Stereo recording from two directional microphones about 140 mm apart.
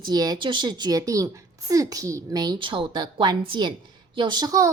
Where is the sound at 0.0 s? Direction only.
30° right (ahead or behind).